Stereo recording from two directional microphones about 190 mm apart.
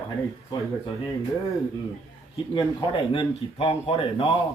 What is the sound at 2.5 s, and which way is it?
Speech, 25° left (ahead or behind).